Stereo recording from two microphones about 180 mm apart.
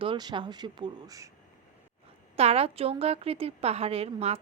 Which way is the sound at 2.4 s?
35° right (ahead or behind).